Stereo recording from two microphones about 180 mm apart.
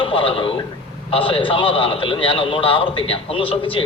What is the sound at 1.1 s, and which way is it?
A man's voice, 30° left (ahead or behind).